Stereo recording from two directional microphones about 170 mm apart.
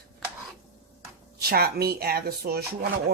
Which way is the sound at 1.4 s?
65° right (ahead or behind).